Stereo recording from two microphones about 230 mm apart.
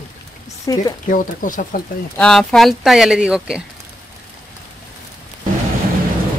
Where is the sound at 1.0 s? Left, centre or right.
Left.